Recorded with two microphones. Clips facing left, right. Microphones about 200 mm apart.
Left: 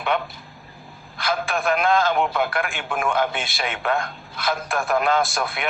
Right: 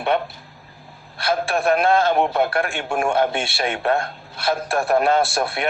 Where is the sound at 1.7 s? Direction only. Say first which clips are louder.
Right 2 dB; 35° right (ahead or behind).